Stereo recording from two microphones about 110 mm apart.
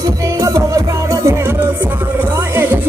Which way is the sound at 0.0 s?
30° right (ahead or behind).